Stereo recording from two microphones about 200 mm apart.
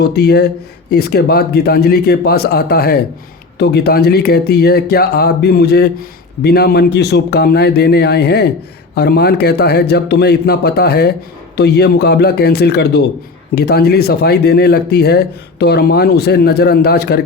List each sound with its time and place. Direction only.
0.0 s speech: 55° left (ahead or behind)